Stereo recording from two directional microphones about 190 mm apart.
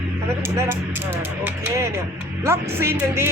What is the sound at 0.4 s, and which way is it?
Speech, 10° right (ahead or behind).